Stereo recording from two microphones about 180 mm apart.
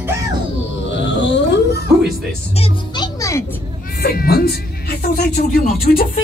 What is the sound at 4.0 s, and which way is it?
Speech, 60° left (ahead or behind).